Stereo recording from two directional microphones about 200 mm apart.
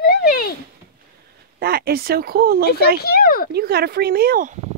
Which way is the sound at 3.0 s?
50° left (ahead or behind).